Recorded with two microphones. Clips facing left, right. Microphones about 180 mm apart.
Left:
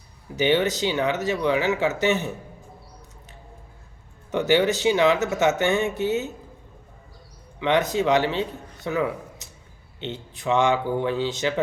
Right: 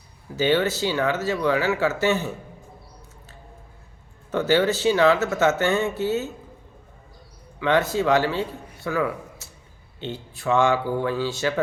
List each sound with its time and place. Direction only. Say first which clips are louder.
0.3 s speech: even; 20° left (ahead or behind)
4.3 s speech: even; 20° left (ahead or behind)
7.6 s speech: even; 20° left (ahead or behind)